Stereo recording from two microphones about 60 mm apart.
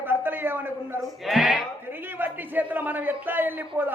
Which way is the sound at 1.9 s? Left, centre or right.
Right.